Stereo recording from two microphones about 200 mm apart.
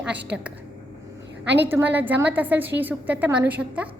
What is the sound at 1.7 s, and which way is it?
A woman's voice, 10° right (ahead or behind).